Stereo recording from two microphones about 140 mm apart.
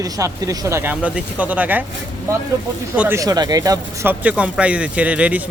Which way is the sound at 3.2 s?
25° right (ahead or behind).